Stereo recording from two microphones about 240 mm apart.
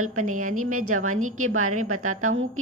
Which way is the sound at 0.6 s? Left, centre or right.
Right.